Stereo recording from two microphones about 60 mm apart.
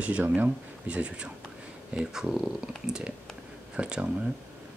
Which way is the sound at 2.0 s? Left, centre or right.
Centre.